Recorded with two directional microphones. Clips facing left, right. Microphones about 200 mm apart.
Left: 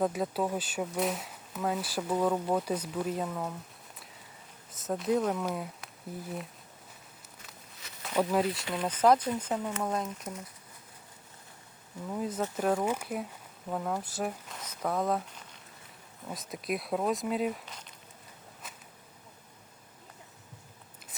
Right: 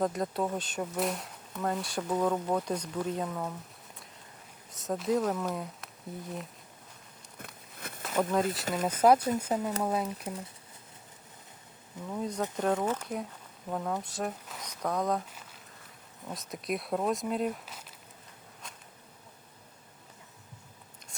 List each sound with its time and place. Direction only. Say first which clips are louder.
0.0 s speech: left 1 dB; 5° left (ahead or behind)
4.7 s speech: even; centre (ahead or behind)
7.3 s a sound: right 8 dB; 55° right (ahead or behind)
8.0 s speech: left 1 dB; centre (ahead or behind)
8.6 s speech: right 2 dB; 45° right (ahead or behind)
9.0 s speech: right 1 dB; 10° right (ahead or behind)
12.0 s speech: even; 5° left (ahead or behind)
18.6 s insect: even; 5° left (ahead or behind)